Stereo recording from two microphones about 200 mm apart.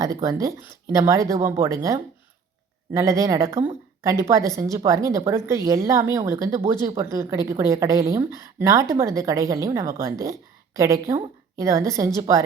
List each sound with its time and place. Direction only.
0.0 s a woman's voice: 15° right (ahead or behind)